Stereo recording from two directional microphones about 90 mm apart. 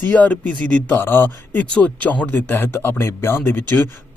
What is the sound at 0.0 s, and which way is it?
Speech, 15° left (ahead or behind).